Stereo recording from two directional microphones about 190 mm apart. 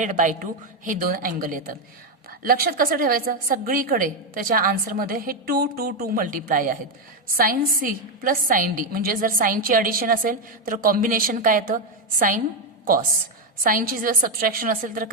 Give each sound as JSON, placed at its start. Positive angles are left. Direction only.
{"t": 0.0, "sound": "a woman's voice", "side_deg": -40}
{"t": 13.7, "sound": "a woman's voice", "side_deg": -45}